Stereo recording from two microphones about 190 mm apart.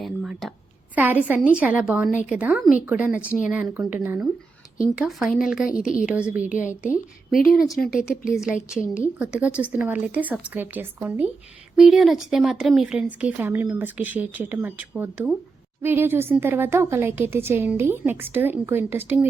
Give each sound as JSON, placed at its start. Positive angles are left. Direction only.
{"t": 0.0, "sound": "a sound", "side_deg": 0}
{"t": 0.9, "sound": "speech", "side_deg": -10}
{"t": 7.8, "sound": "speech", "side_deg": 50}
{"t": 8.2, "sound": "speech", "side_deg": -5}